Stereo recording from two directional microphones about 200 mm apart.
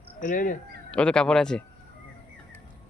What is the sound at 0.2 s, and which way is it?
Speech, 40° left (ahead or behind).